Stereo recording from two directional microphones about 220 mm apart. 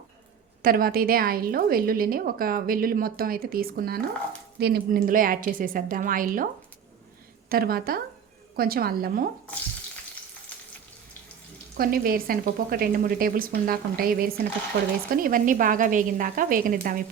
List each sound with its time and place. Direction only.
0.6 s a woman's voice: 40° right (ahead or behind)
7.5 s a woman's voice: 45° right (ahead or behind)
11.8 s a woman's voice: 40° right (ahead or behind)